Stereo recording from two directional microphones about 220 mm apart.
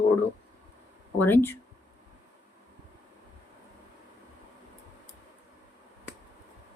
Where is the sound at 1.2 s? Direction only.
10° left (ahead or behind).